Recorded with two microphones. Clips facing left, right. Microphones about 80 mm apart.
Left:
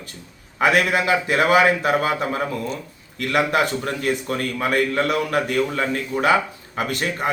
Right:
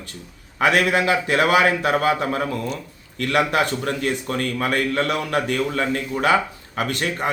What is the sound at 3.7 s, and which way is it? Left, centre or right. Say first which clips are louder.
A man's voice: even; centre.